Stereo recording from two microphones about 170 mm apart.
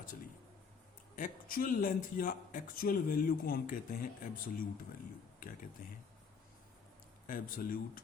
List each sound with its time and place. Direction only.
1.1 s a man's voice: 55° left (ahead or behind)
7.3 s a man's voice: 55° left (ahead or behind)